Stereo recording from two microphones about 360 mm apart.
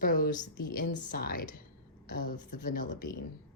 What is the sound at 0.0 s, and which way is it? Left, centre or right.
A woman's voice, left.